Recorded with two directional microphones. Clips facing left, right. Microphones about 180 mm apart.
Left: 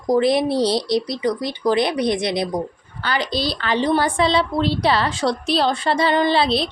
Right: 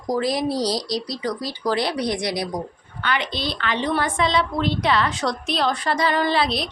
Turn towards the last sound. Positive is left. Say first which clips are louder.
# left 4 dB
turn(degrees=30)  # may be behind; listen again after turning